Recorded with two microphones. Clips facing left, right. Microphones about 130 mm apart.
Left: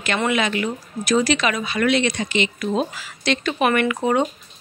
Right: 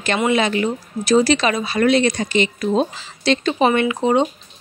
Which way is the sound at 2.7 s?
25° right (ahead or behind).